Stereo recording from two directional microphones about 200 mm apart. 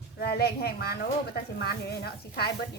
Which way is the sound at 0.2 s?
50° left (ahead or behind).